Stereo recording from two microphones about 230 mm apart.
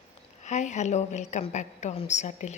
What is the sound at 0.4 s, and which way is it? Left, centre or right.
A woman's voice, left.